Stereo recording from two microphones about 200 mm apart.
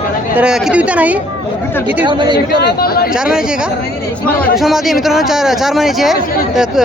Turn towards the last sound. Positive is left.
turn(degrees=0)  # may be behind; listen again after turning